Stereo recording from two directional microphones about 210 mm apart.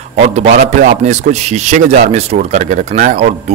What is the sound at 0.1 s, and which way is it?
A man's voice, 30° right (ahead or behind).